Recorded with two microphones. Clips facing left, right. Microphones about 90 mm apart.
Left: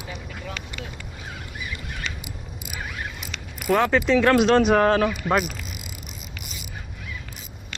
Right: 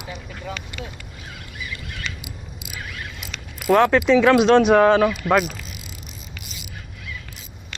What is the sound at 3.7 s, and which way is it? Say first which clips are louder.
Speech: right 4 dB; centre (ahead or behind).